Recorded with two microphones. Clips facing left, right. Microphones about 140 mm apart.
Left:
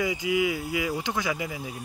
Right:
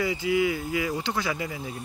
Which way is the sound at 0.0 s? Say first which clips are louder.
Right 1 dB; 15° left (ahead or behind).